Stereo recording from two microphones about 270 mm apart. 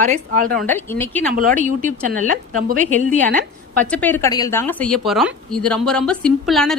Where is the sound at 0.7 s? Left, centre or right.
Centre.